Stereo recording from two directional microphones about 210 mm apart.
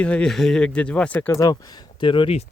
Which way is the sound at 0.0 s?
5° left (ahead or behind).